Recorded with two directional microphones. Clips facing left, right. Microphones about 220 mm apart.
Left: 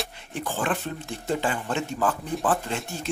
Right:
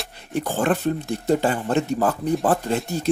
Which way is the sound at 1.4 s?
40° right (ahead or behind).